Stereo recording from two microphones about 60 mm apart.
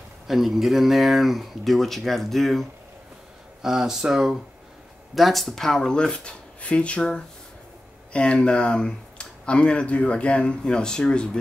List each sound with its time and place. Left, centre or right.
0.3 s speech: centre
3.6 s speech: centre